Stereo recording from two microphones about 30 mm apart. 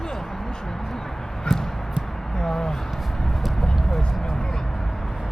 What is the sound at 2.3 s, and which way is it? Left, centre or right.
Speech, left.